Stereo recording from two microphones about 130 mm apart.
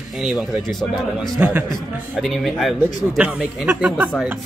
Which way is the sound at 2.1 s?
5° left (ahead or behind).